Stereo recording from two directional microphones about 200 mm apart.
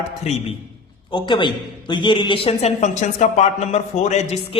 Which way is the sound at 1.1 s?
25° left (ahead or behind).